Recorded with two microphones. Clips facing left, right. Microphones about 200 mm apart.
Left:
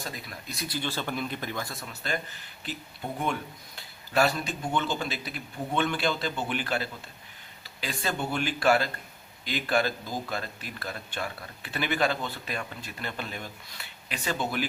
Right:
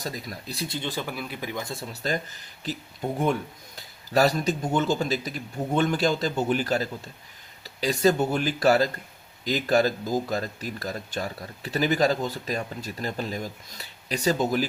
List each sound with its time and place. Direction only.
0.0 s speech: 40° right (ahead or behind); by 1.0 s 20° right (ahead or behind)
1.0 s speech: 5° right (ahead or behind)
1.7 s speech: 35° right (ahead or behind)
3.8 s speech: 40° right (ahead or behind)